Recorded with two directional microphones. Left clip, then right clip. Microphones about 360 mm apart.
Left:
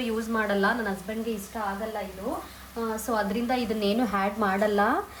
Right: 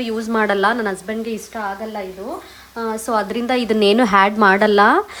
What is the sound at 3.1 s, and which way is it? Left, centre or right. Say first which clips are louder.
Speech: right 9 dB; centre.